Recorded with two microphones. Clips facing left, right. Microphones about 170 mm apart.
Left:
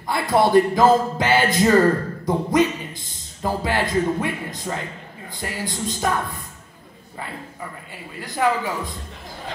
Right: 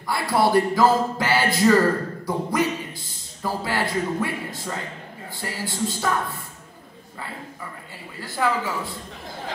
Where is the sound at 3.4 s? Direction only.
20° left (ahead or behind).